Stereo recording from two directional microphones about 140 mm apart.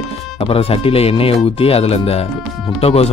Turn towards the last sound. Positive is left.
turn(degrees=45)  # may be behind; listen again after turning